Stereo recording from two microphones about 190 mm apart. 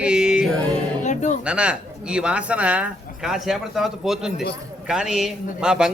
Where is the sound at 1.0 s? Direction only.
40° left (ahead or behind).